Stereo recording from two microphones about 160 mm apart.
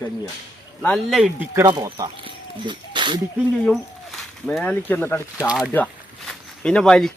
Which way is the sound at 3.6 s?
5° left (ahead or behind).